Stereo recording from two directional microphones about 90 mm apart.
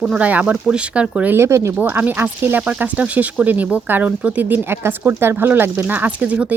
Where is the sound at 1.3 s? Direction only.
30° right (ahead or behind).